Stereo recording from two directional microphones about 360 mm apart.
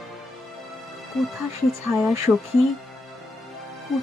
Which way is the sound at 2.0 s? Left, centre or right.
Centre.